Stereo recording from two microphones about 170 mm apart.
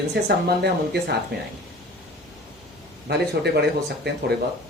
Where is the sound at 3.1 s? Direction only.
75° right (ahead or behind).